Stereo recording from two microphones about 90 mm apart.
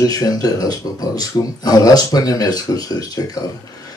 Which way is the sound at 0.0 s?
45° left (ahead or behind).